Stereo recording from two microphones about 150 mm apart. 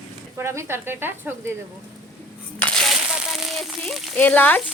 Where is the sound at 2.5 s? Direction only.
5° left (ahead or behind).